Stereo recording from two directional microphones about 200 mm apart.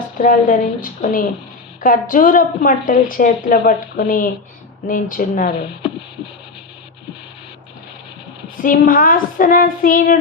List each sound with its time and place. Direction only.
0.2 s a woman's voice: 40° left (ahead or behind)
8.6 s a woman's voice: 45° left (ahead or behind)